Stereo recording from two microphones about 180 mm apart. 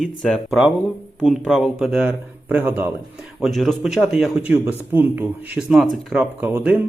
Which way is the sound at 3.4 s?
Centre (ahead or behind).